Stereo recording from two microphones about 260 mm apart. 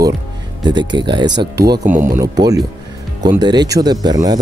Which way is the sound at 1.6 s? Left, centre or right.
Right.